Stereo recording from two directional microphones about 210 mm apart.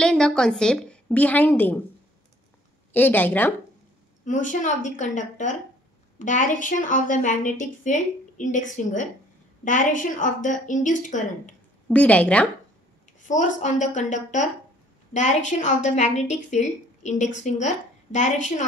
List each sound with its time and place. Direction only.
0.0 s a woman's voice: 5° left (ahead or behind)
2.9 s a woman's voice: 10° left (ahead or behind)
4.2 s a woman's voice: 35° left (ahead or behind)
11.9 s a woman's voice: 5° left (ahead or behind)
13.3 s a woman's voice: 35° left (ahead or behind)